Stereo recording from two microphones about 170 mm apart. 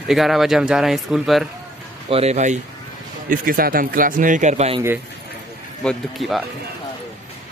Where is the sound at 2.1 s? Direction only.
40° right (ahead or behind).